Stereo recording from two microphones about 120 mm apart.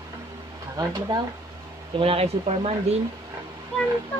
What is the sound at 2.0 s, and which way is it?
Speech, 55° right (ahead or behind).